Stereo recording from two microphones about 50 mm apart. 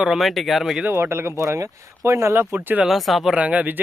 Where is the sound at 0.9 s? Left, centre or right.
Right.